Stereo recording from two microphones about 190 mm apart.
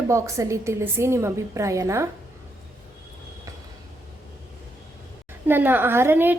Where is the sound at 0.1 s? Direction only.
15° right (ahead or behind).